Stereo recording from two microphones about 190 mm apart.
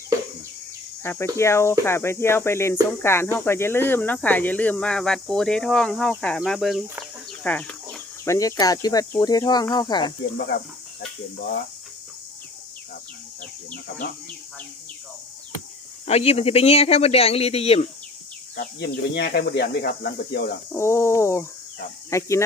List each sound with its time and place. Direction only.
1.0 s speech: 10° left (ahead or behind)
14.0 s speech: 55° left (ahead or behind)
16.0 s speech: 35° left (ahead or behind)
18.5 s speech: 50° left (ahead or behind)
20.7 s speech: 15° left (ahead or behind)